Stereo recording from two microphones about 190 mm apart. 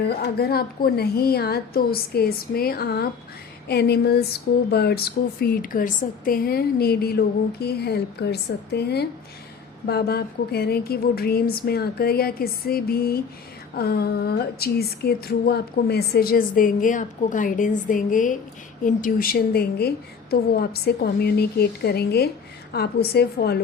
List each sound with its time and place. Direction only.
0.0 s a woman's voice: 55° left (ahead or behind)
13.7 s a sound: 55° left (ahead or behind)
20.3 s a woman's voice: 55° left (ahead or behind)